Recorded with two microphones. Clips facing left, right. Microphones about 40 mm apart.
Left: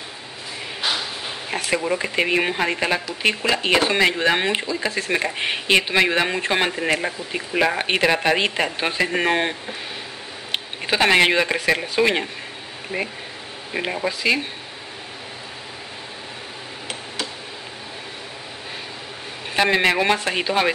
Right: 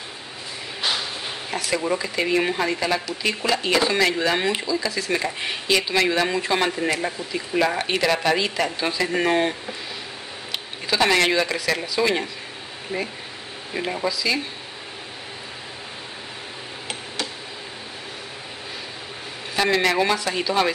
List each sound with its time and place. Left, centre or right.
0.8 s a sound: centre
1.5 s speech: left
11.0 s speech: left
19.5 s speech: left